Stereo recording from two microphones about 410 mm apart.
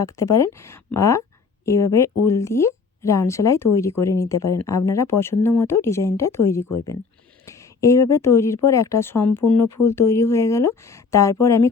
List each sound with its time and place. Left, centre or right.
0.0 s speech: centre